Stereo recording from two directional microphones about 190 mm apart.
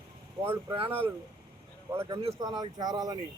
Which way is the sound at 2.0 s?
30° right (ahead or behind).